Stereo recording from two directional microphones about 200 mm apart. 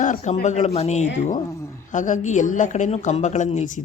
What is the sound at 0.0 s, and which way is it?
A woman's voice, 40° left (ahead or behind).